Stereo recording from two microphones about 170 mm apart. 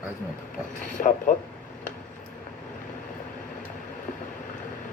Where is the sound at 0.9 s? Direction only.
50° left (ahead or behind).